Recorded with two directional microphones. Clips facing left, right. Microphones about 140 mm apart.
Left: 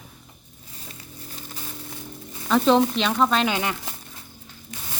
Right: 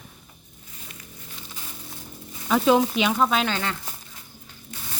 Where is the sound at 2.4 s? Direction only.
5° right (ahead or behind).